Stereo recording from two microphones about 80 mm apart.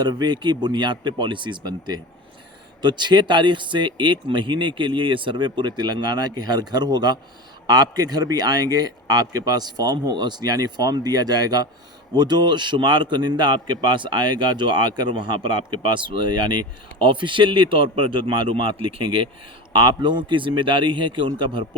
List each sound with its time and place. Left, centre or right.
0.0 s a man's voice: right
19.7 s a man's voice: right